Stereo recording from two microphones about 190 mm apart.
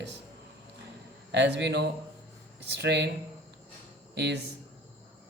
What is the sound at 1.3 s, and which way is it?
Speech, 65° right (ahead or behind).